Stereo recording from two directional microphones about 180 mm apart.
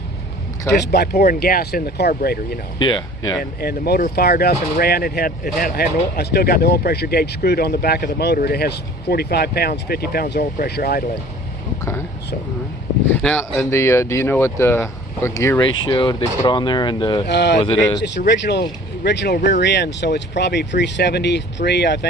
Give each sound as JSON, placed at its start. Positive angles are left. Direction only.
{"t": 0.9, "sound": "speech", "side_deg": 60}
{"t": 2.7, "sound": "speech", "side_deg": 25}
{"t": 3.6, "sound": "speech", "side_deg": 60}
{"t": 11.8, "sound": "a sound", "side_deg": 15}
{"t": 13.1, "sound": "speech", "side_deg": 5}
{"t": 13.7, "sound": "speech", "side_deg": 15}
{"t": 17.2, "sound": "speech", "side_deg": 75}
{"t": 17.6, "sound": "speech", "side_deg": 30}
{"t": 18.3, "sound": "speech", "side_deg": 70}